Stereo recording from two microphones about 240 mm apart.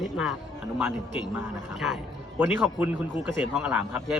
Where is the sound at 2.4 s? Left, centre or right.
Centre.